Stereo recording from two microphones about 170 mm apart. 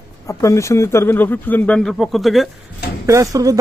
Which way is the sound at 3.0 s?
20° right (ahead or behind).